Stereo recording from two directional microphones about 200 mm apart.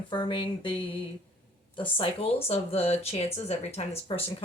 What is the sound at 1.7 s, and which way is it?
Speech, 25° left (ahead or behind).